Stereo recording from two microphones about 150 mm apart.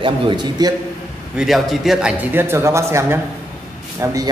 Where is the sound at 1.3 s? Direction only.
Centre (ahead or behind).